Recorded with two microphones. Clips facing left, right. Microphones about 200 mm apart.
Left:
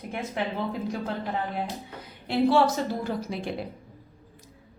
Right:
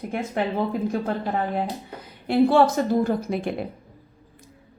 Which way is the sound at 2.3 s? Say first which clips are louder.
Right 4 dB; 50° right (ahead or behind).